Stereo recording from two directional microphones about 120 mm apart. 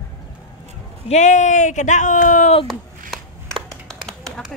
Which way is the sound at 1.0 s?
75° left (ahead or behind).